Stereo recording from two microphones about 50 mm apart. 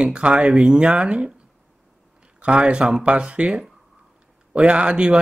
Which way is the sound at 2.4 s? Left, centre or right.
Right.